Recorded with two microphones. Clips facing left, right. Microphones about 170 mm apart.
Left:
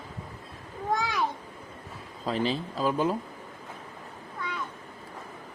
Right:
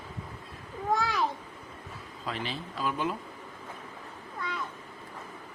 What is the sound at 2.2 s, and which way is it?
Speech, 35° left (ahead or behind).